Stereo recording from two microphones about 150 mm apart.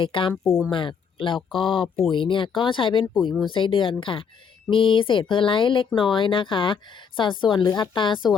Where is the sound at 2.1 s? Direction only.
35° left (ahead or behind).